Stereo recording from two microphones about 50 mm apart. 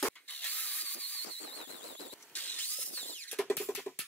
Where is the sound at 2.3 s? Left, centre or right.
Left.